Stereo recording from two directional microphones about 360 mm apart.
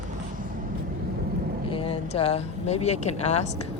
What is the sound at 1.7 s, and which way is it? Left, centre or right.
Speech, centre.